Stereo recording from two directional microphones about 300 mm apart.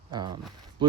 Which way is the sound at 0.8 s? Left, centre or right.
Centre.